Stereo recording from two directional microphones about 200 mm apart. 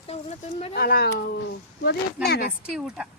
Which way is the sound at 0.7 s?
50° left (ahead or behind).